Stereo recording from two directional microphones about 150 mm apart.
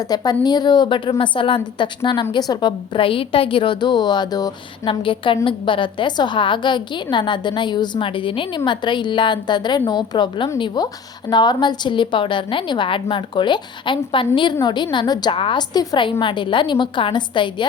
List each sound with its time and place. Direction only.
0.0 s a woman's voice: 25° left (ahead or behind)